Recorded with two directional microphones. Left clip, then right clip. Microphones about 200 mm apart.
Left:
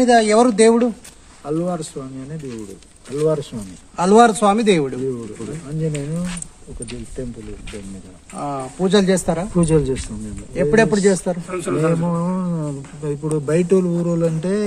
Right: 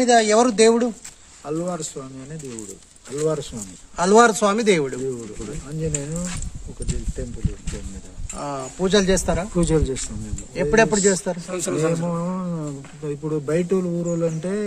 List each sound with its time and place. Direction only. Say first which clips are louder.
0.0 s speech: left 3 dB; centre (ahead or behind)
3.2 s speech: left 4 dB; 5° right (ahead or behind)
3.9 s speech: left 2 dB; 15° right (ahead or behind)
8.4 s speech: left 3 dB; 20° right (ahead or behind)
9.6 s speech: left 5 dB; 5° left (ahead or behind)
10.5 s speech: left 2 dB; 10° right (ahead or behind)
11.4 s a man's voice: left 2 dB; 80° right
12.0 s speech: left 3 dB; 5° left (ahead or behind)